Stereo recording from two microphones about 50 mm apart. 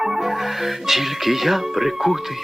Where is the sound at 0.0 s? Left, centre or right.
Centre.